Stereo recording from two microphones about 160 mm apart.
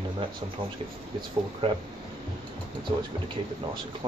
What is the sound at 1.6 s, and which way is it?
Speech, 35° right (ahead or behind).